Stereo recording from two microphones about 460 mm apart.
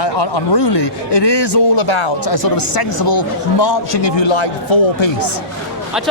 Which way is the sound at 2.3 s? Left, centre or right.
Left.